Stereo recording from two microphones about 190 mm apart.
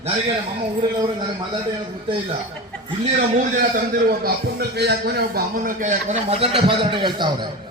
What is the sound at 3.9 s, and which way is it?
A man's voice, 55° right (ahead or behind).